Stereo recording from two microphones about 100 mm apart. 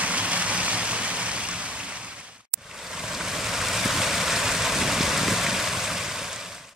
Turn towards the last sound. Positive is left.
turn(degrees=-5)  # may be behind; listen again after turning